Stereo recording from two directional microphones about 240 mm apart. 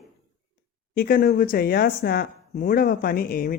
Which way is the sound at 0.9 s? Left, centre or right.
Left.